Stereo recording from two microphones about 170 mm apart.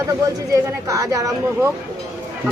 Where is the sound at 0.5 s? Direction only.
20° right (ahead or behind).